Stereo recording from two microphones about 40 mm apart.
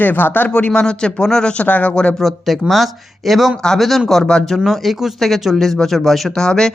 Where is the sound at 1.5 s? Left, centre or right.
Left.